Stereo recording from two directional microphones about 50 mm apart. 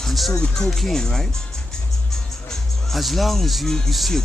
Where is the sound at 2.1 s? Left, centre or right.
Centre.